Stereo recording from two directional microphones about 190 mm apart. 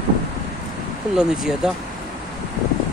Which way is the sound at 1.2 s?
Centre (ahead or behind).